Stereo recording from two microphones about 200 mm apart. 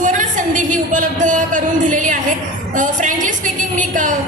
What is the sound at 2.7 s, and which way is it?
A woman's voice, 40° right (ahead or behind).